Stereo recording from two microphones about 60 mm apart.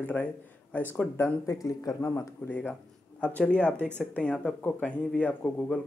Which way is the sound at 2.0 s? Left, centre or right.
Left.